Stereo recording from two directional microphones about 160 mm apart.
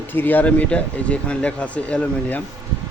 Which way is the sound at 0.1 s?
10° left (ahead or behind).